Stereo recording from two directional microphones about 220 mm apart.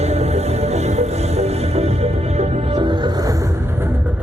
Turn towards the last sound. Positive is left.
turn(degrees=-10)  # may be behind; listen again after turning